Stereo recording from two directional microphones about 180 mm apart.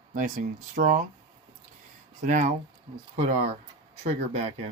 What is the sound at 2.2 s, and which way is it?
Speech, 45° right (ahead or behind).